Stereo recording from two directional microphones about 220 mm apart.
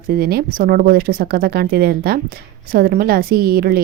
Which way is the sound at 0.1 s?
45° right (ahead or behind).